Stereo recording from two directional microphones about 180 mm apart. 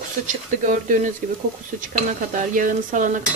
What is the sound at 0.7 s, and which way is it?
Stir, 45° right (ahead or behind).